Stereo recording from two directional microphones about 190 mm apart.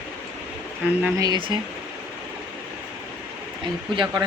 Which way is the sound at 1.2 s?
20° right (ahead or behind).